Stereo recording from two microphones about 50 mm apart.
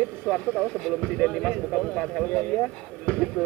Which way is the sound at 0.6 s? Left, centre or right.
Centre.